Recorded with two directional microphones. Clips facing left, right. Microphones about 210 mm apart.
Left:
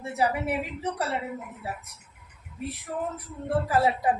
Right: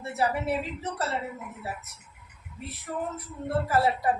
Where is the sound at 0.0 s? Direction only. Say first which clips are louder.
Left 1 dB; 15° left (ahead or behind).